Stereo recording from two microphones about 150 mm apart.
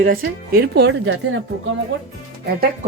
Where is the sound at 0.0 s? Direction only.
75° right (ahead or behind).